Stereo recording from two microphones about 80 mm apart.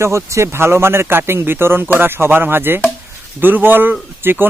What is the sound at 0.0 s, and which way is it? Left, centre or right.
Speech, right.